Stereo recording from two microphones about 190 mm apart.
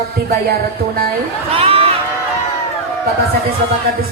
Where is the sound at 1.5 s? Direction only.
30° right (ahead or behind).